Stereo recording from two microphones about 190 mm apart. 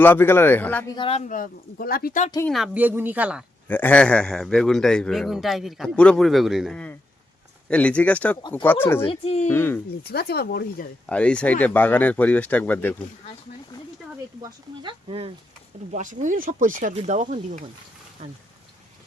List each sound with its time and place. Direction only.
0.0 s speech: 10° left (ahead or behind)
0.9 s speech: 30° left (ahead or behind); by 2.2 s 50° left (ahead or behind)
2.5 s a woman's voice: 5° right (ahead or behind)
3.7 s a man's voice: 10° left (ahead or behind)
8.4 s speech: 25° left (ahead or behind)
8.6 s speech: 10° left (ahead or behind)
9.0 s speech: 35° left (ahead or behind)
9.5 s speech: 10° left (ahead or behind)
10.1 s speech: 55° left (ahead or behind)
11.1 s speech: 5° left (ahead or behind)
14.4 s speech: 25° right (ahead or behind)
16.2 s speech: 40° right (ahead or behind)